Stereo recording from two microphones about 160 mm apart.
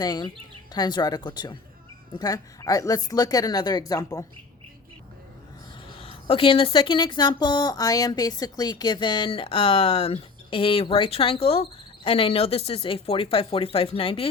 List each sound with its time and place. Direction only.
0.0 s speech: 25° left (ahead or behind)
6.0 s speech: 35° left (ahead or behind)